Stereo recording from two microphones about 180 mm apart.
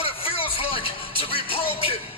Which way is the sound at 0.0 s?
30° left (ahead or behind).